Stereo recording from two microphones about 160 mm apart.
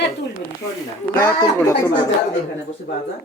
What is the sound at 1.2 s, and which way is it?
Speech, 20° left (ahead or behind).